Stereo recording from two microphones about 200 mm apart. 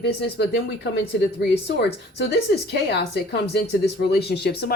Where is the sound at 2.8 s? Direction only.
55° left (ahead or behind).